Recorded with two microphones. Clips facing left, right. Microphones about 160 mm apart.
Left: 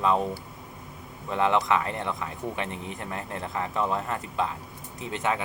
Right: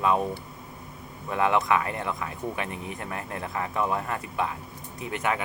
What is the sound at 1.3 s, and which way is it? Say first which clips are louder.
Speech: even; 25° left (ahead or behind).